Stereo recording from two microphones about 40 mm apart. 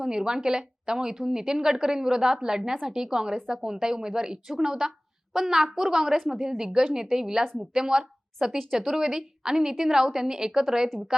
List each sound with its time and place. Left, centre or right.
0.0 s a woman's voice: centre